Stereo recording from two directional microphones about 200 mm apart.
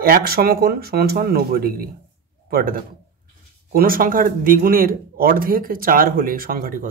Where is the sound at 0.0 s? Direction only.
50° right (ahead or behind).